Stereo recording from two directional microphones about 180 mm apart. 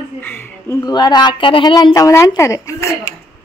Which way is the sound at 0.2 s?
10° left (ahead or behind).